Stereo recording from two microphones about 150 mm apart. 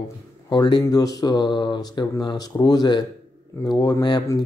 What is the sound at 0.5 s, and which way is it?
Speech, 30° left (ahead or behind).